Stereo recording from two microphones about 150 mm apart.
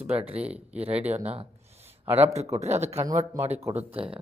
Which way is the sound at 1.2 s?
45° right (ahead or behind).